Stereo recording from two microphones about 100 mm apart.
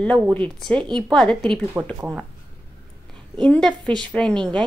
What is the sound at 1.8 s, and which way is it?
Speech, 20° right (ahead or behind).